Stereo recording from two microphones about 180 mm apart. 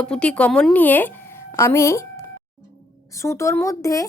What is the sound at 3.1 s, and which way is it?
Speech, 15° left (ahead or behind).